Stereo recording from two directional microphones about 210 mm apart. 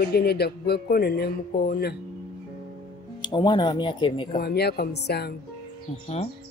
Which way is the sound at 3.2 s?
20° left (ahead or behind).